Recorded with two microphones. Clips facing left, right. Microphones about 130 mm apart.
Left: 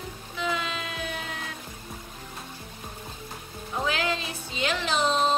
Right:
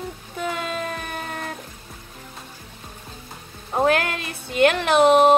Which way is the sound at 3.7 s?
55° right (ahead or behind).